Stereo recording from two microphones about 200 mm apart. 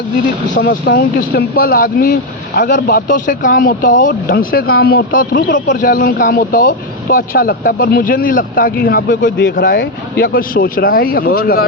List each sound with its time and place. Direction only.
0.5 s speech: 45° left (ahead or behind)